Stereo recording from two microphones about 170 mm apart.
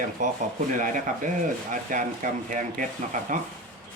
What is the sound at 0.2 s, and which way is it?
Speech, 50° right (ahead or behind).